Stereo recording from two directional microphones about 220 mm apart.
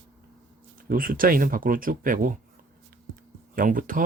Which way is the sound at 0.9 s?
40° right (ahead or behind).